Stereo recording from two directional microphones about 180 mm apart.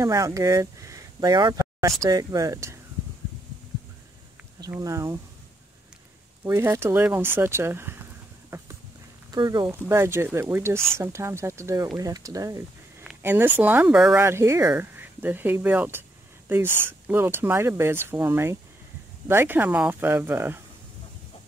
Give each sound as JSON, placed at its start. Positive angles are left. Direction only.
{"t": 0.0, "sound": "speech", "side_deg": -15}
{"t": 4.6, "sound": "speech", "side_deg": -20}
{"t": 6.4, "sound": "speech", "side_deg": -15}
{"t": 8.5, "sound": "clip-clop", "side_deg": -15}
{"t": 9.3, "sound": "speech", "side_deg": -25}
{"t": 13.0, "sound": "speech", "side_deg": -5}